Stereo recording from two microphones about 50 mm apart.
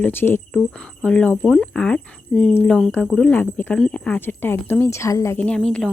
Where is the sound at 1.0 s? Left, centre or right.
Left.